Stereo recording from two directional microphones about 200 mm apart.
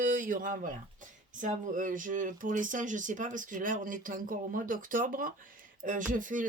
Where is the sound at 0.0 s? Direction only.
40° right (ahead or behind).